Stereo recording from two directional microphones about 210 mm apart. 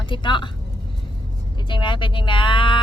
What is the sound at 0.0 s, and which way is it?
Speech, 20° left (ahead or behind).